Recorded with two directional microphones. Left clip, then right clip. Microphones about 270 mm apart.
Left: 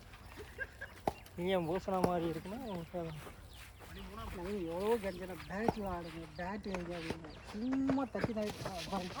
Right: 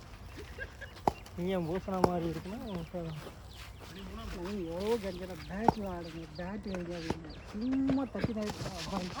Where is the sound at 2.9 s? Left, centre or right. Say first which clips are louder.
Even; left.